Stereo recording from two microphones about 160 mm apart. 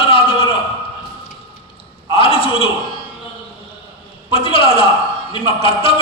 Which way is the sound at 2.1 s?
35° left (ahead or behind).